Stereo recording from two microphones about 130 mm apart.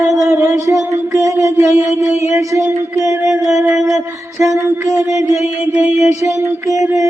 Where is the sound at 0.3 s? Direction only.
20° right (ahead or behind).